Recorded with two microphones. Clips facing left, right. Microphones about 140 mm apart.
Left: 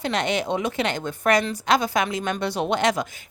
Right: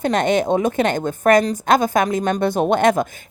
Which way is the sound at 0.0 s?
50° right (ahead or behind).